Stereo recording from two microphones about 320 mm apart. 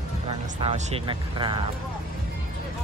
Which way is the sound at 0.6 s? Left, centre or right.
Centre.